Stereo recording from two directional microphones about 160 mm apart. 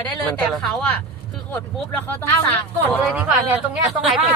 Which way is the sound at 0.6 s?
5° left (ahead or behind).